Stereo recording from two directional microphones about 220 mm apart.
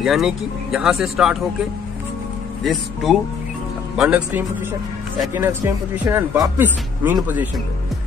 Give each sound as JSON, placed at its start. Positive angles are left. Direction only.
{"t": 0.0, "sound": "speech", "side_deg": 0}
{"t": 2.6, "sound": "speech", "side_deg": 0}